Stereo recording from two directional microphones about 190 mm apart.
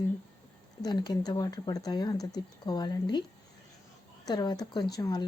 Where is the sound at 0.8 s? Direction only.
20° left (ahead or behind).